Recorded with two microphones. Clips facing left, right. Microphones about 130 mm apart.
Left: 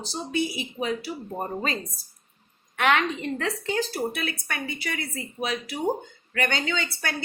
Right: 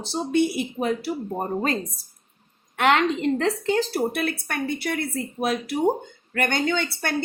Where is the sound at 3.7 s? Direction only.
55° right (ahead or behind).